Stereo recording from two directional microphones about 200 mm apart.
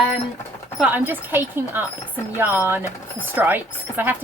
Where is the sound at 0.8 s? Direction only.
10° right (ahead or behind).